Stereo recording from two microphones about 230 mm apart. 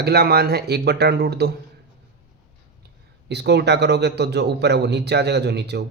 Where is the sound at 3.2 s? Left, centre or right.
Right.